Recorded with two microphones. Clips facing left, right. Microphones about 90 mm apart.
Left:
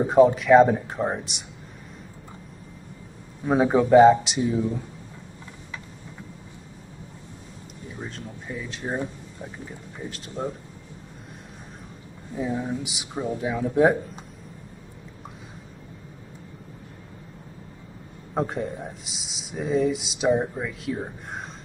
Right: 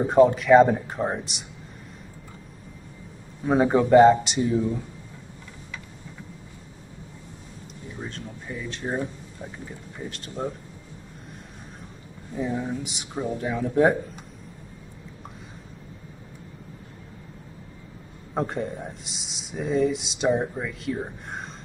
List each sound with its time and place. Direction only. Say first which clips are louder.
0.0 s speech: left 1 dB; centre (ahead or behind)
3.4 s speech: even; centre (ahead or behind)
8.0 s speech: even; centre (ahead or behind)
12.4 s speech: even; centre (ahead or behind)
18.3 s speech: left 1 dB; centre (ahead or behind)